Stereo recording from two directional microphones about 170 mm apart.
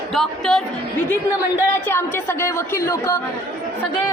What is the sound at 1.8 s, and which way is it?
A woman's voice, 15° left (ahead or behind).